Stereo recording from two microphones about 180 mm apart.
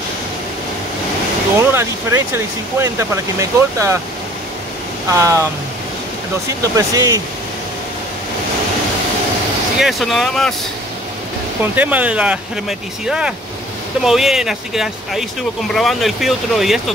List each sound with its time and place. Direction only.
1.6 s speech: 15° right (ahead or behind)
5.1 s speech: 15° right (ahead or behind)
6.6 s speech: 20° right (ahead or behind)
9.8 s speech: centre (ahead or behind)
11.6 s speech: 10° right (ahead or behind)